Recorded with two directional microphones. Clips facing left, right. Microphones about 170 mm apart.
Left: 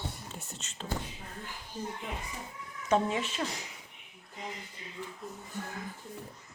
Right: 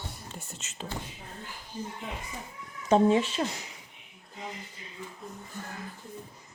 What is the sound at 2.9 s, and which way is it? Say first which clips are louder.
Speech: right 7 dB; 30° right (ahead or behind).